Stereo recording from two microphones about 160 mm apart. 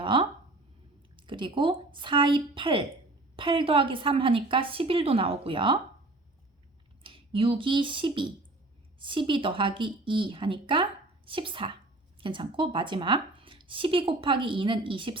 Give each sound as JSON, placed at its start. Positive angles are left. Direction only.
{"t": 0.0, "sound": "a sound", "side_deg": -35}
{"t": 1.1, "sound": "a woman's voice", "side_deg": -30}
{"t": 7.0, "sound": "a woman's voice", "side_deg": -35}